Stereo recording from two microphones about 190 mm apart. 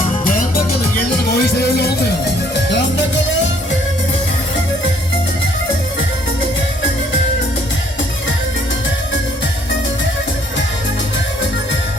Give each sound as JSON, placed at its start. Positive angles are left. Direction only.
{"t": 0.3, "sound": "music", "side_deg": 45}